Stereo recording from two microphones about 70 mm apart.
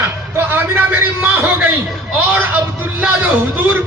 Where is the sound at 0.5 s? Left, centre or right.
Right.